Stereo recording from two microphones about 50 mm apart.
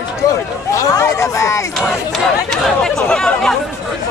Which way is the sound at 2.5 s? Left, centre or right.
Centre.